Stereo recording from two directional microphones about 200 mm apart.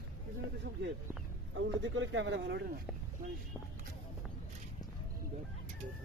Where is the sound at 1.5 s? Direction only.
70° right (ahead or behind).